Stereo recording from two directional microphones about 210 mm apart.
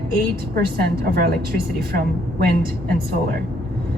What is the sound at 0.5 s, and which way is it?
Speech, 45° right (ahead or behind).